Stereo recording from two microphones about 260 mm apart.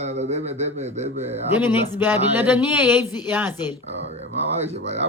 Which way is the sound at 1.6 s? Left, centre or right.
Centre.